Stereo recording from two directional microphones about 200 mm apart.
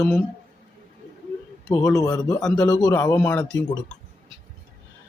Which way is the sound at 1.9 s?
20° left (ahead or behind).